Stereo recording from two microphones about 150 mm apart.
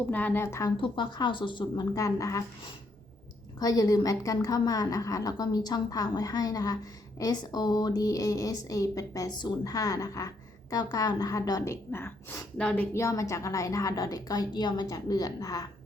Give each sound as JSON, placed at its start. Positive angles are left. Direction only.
{"t": 0.1, "sound": "a woman's voice", "side_deg": 10}
{"t": 0.8, "sound": "speech", "side_deg": 30}
{"t": 3.6, "sound": "a woman's voice", "side_deg": 25}
{"t": 12.9, "sound": "a woman's voice", "side_deg": 20}